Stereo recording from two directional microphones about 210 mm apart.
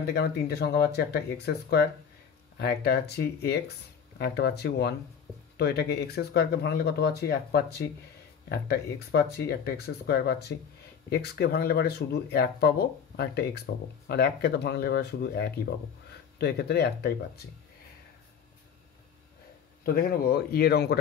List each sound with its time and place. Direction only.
0.0 s speech: 50° left (ahead or behind)
19.8 s speech: 45° left (ahead or behind)